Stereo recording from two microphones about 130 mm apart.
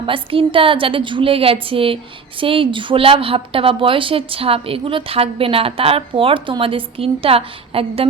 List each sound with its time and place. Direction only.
0.0 s a woman's voice: 45° right (ahead or behind)